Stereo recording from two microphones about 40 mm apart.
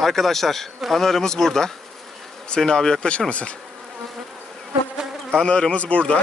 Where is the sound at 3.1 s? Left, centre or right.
Left.